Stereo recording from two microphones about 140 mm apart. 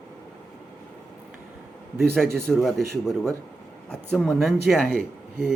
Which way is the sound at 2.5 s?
Centre (ahead or behind).